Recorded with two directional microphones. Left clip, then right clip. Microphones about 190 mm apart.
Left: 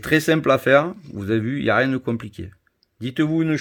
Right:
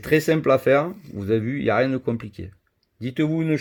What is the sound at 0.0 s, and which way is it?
Speech, 35° left (ahead or behind).